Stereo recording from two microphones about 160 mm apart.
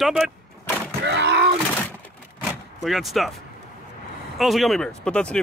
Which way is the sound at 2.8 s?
Centre (ahead or behind).